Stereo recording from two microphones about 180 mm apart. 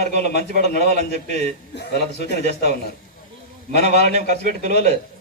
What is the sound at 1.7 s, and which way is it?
Speech, 70° left (ahead or behind).